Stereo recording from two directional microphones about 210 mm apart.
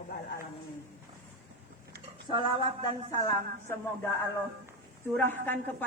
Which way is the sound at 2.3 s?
25° right (ahead or behind).